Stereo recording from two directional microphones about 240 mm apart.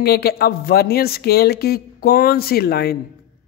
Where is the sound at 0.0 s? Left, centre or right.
Left.